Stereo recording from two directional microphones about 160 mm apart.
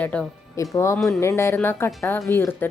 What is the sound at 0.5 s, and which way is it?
Speech, 20° left (ahead or behind).